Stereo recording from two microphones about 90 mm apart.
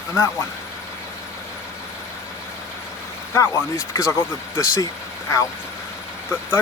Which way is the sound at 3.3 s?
35° left (ahead or behind).